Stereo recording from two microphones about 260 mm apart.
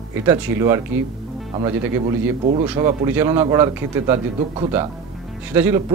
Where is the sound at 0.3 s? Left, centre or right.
Centre.